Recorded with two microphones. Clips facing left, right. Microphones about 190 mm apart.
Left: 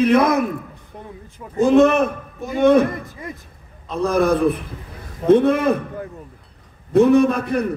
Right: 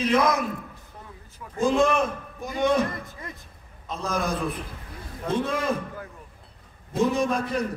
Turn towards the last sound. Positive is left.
turn(degrees=60)  # may be behind; listen again after turning